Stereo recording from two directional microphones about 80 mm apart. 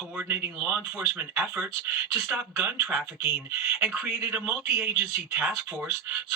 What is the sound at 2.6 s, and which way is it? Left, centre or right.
Speech, right.